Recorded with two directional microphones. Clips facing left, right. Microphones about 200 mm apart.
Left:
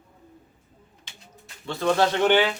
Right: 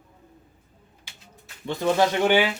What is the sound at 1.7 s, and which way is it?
Speech, 15° right (ahead or behind).